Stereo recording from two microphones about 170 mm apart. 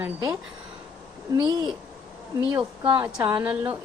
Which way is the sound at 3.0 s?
15° right (ahead or behind).